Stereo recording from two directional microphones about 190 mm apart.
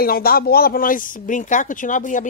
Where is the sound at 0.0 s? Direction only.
50° left (ahead or behind).